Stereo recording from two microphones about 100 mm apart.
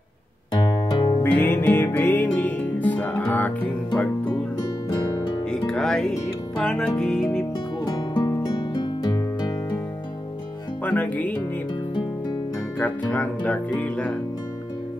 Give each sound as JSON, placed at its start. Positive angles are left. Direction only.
{"t": 0.8, "sound": "music", "side_deg": 50}
{"t": 1.2, "sound": "music", "side_deg": 20}
{"t": 4.8, "sound": "music", "side_deg": 35}
{"t": 5.7, "sound": "music", "side_deg": 5}
{"t": 7.8, "sound": "music", "side_deg": 45}
{"t": 10.8, "sound": "speech", "side_deg": 15}
{"t": 13.1, "sound": "speech", "side_deg": 15}